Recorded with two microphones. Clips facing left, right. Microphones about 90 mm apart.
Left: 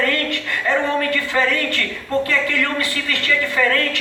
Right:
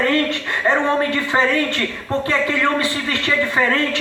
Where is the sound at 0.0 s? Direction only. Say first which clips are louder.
Right 3 dB; 25° right (ahead or behind).